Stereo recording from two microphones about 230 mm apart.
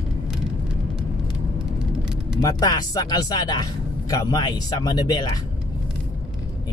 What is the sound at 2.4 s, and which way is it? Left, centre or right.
Speech, centre.